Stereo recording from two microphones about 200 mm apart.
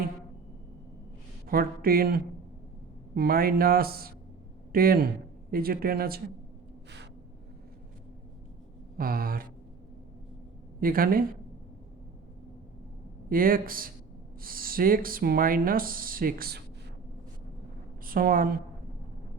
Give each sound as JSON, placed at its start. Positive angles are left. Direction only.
{"t": 1.5, "sound": "speech", "side_deg": -45}
{"t": 9.0, "sound": "speech", "side_deg": -45}
{"t": 10.8, "sound": "speech", "side_deg": -45}
{"t": 13.3, "sound": "speech", "side_deg": -45}
{"t": 18.0, "sound": "a woman's voice", "side_deg": -45}